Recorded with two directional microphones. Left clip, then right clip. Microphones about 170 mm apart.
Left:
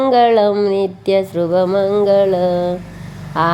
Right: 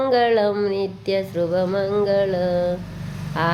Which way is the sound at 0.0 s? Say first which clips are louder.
Left 6 dB; 35° left (ahead or behind).